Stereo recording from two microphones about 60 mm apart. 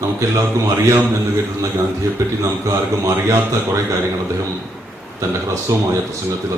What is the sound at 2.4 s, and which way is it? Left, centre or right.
Speech, right.